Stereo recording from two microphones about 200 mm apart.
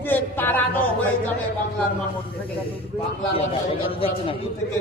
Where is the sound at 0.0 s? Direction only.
10° left (ahead or behind).